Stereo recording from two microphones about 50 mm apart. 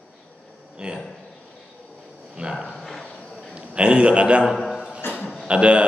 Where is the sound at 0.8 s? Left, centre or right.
Centre.